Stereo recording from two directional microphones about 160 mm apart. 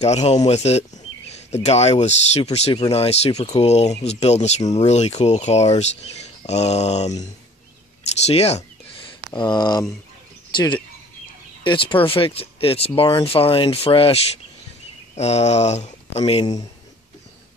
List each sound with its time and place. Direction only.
0.0 s speech: 45° left (ahead or behind)
8.3 s speech: 40° left (ahead or behind)
9.3 s speech: 30° left (ahead or behind)